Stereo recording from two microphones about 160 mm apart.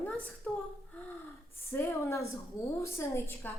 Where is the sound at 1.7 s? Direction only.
15° left (ahead or behind).